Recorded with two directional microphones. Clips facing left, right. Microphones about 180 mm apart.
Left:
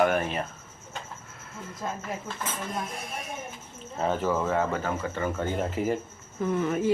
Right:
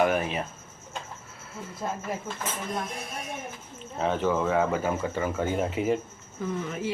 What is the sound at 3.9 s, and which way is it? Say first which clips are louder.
Speech: right 1 dB; centre (ahead or behind).